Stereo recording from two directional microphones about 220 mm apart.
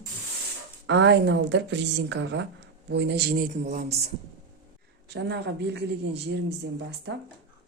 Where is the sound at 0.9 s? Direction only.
55° right (ahead or behind); by 4.1 s 30° right (ahead or behind).